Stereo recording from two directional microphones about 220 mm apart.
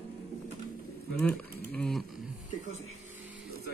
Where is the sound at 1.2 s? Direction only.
5° left (ahead or behind).